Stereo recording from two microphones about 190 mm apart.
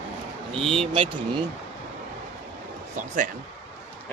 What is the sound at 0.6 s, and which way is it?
Speech, 30° right (ahead or behind).